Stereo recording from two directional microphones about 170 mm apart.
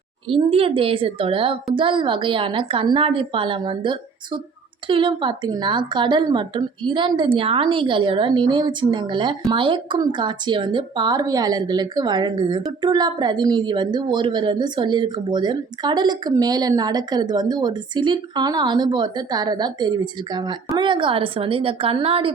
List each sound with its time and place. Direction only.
0.3 s a woman's voice: 35° right (ahead or behind)